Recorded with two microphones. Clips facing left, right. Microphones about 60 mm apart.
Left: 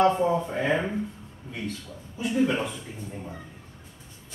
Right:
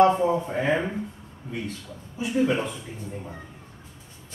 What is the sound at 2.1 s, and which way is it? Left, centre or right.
A man's voice, centre.